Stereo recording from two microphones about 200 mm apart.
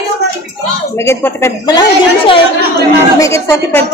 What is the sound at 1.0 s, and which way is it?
Speech, 15° left (ahead or behind).